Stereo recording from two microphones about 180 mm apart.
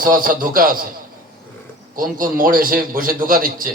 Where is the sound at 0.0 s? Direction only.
50° right (ahead or behind).